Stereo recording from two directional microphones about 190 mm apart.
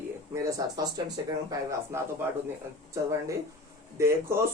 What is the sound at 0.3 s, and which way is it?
Speech, 20° right (ahead or behind).